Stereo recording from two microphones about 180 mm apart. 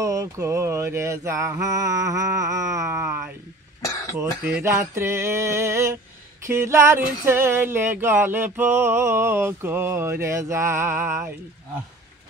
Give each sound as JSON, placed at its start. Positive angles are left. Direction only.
{"t": 0.0, "sound": "male singing", "side_deg": -15}
{"t": 4.6, "sound": "male singing", "side_deg": -15}